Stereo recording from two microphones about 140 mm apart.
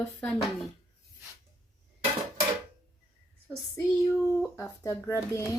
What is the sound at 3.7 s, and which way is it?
Speech, 20° left (ahead or behind).